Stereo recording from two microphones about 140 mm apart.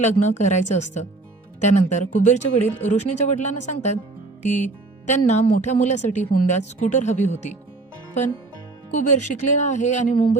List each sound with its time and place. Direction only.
0.0 s a woman's voice: 55° left (ahead or behind)
9.0 s a woman's voice: 60° left (ahead or behind)